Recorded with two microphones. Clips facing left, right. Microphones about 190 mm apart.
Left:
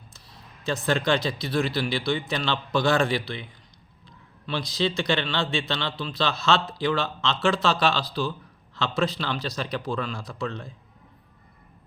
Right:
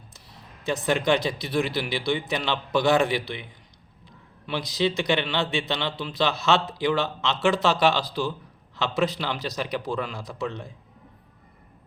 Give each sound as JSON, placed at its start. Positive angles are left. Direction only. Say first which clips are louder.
{"t": 0.6, "sound": "a man's voice", "louder": "right 1 dB", "side_deg": -20}
{"t": 4.4, "sound": "a man's voice", "louder": "right 1 dB", "side_deg": -15}